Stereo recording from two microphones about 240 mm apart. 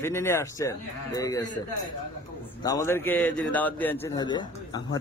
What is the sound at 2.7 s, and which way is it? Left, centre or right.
Speech, centre.